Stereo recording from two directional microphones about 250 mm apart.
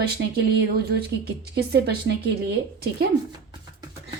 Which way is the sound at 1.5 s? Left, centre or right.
Right.